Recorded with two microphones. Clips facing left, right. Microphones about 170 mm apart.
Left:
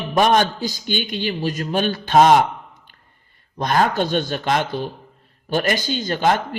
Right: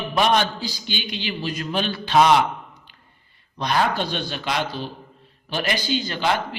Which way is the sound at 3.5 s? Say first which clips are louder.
Left 3 dB; 50° left (ahead or behind).